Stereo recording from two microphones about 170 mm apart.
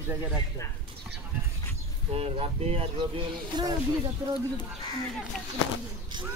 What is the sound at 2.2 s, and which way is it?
Speech, 35° right (ahead or behind).